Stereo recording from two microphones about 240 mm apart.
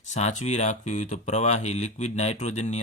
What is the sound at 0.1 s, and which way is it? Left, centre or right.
Speech, left.